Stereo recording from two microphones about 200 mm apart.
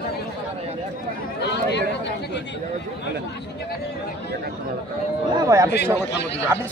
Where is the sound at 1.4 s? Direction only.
55° left (ahead or behind).